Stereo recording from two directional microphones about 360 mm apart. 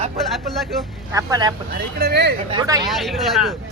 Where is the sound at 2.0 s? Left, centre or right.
Right.